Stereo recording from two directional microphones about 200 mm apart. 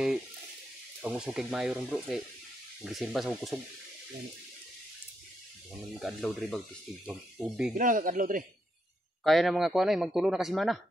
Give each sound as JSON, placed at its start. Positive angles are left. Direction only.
{"t": 1.0, "sound": "speech", "side_deg": -5}
{"t": 5.9, "sound": "speech", "side_deg": 0}
{"t": 7.7, "sound": "speech", "side_deg": -40}
{"t": 9.2, "sound": "speech", "side_deg": 0}